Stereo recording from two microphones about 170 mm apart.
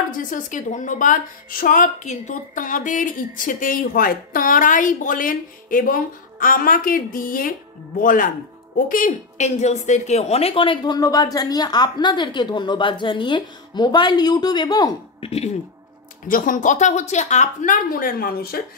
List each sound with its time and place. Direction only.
0.2 s a woman's voice: 50° left (ahead or behind); by 15.2 s 25° left (ahead or behind)
15.2 s speech: 40° left (ahead or behind)
16.3 s a woman's voice: 55° left (ahead or behind)